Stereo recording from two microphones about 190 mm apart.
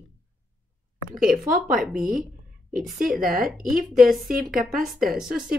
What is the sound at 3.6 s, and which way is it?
Speech, 45° right (ahead or behind).